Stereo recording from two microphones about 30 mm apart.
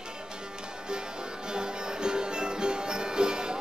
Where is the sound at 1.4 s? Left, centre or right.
Right.